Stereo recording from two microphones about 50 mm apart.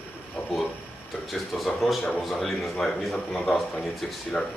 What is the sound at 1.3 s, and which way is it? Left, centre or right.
Speech, centre.